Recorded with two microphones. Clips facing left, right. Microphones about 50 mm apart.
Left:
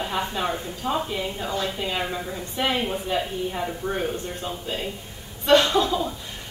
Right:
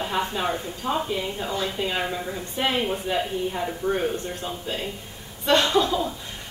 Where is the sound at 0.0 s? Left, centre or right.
Centre.